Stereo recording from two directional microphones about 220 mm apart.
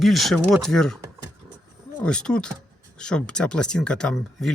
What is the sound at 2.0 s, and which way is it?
Speech, 5° left (ahead or behind).